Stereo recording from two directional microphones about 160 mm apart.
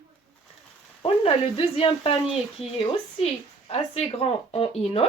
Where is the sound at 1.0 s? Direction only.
35° left (ahead or behind).